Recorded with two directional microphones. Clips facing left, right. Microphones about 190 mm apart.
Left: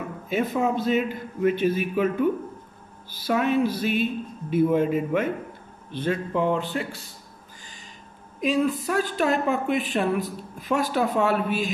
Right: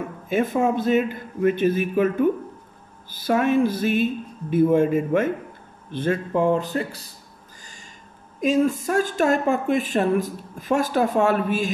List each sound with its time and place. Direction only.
0.3 s speech: 50° right (ahead or behind)
3.1 s speech: 50° right (ahead or behind)
8.4 s speech: 45° right (ahead or behind)